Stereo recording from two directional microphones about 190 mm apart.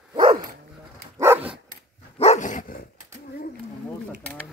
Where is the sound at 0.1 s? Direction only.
25° right (ahead or behind).